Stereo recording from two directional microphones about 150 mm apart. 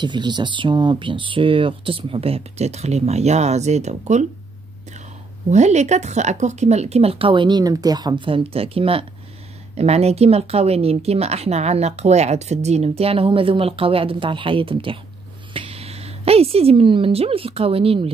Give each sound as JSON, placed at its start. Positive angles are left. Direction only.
{"t": 0.0, "sound": "speech", "side_deg": -30}
{"t": 5.5, "sound": "a woman's voice", "side_deg": -50}